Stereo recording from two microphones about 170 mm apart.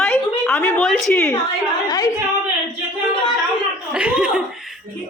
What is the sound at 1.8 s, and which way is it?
Speech, 20° left (ahead or behind).